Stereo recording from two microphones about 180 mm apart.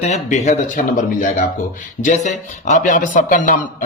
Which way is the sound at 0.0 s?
40° left (ahead or behind).